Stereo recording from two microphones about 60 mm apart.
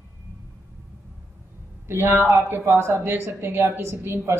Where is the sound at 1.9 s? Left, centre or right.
Right.